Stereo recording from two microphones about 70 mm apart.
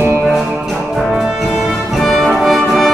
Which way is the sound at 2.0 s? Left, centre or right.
Centre.